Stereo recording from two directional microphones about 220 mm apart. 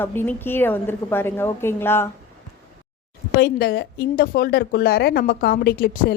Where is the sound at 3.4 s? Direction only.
45° left (ahead or behind).